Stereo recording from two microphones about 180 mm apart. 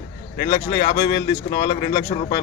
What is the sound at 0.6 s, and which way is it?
Speech, 15° left (ahead or behind).